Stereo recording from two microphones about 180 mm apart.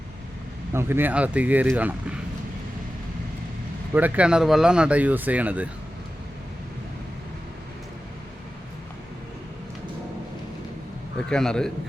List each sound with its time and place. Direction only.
0.7 s speech: 15° right (ahead or behind)
3.9 s speech: 10° right (ahead or behind)
11.3 s a man's voice: 5° left (ahead or behind)